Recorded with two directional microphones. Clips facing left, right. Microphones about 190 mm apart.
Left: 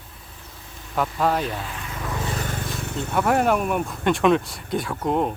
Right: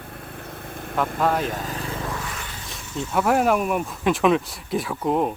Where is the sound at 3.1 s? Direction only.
Centre (ahead or behind).